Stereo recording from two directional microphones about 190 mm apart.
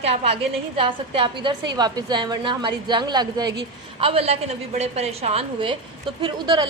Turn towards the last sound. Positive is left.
turn(degrees=-25)  # may be behind; listen again after turning